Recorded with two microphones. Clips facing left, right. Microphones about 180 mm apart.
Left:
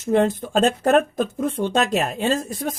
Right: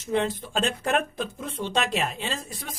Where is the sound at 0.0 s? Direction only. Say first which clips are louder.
Left 7 dB; 50° left (ahead or behind).